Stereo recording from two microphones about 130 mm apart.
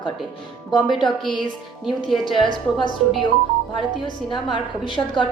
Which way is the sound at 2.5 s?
40° left (ahead or behind).